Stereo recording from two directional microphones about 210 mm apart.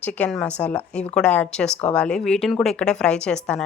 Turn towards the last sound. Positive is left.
turn(degrees=5)  # may be behind; listen again after turning